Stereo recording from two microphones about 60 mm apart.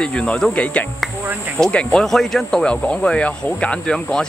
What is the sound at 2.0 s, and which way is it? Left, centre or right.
Speech, centre.